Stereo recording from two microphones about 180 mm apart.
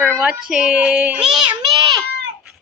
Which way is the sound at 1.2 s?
25° right (ahead or behind).